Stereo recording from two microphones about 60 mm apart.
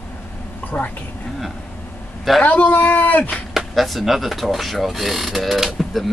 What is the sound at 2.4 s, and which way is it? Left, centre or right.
Speech, left.